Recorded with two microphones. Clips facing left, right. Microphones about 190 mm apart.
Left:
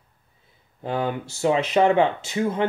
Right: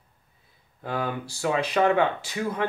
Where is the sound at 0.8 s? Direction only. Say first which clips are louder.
Left 4 dB; 25° left (ahead or behind).